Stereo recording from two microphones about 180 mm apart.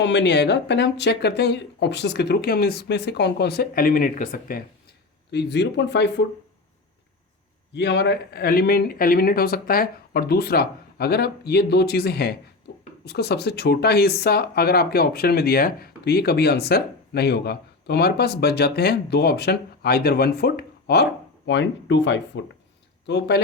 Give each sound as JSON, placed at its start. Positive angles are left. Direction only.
{"t": 0.0, "sound": "speech", "side_deg": 75}
{"t": 5.3, "sound": "speech", "side_deg": 70}
{"t": 7.7, "sound": "speech", "side_deg": 70}
{"t": 23.0, "sound": "speech", "side_deg": 70}